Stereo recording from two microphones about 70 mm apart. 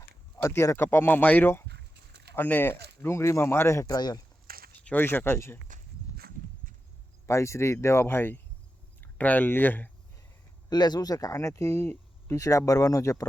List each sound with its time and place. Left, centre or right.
0.4 s speech: left
0.9 s speech: left
3.8 s speech: left
4.9 s speech: left
7.3 s speech: left
9.0 s speech: left
10.7 s speech: left
12.4 s speech: left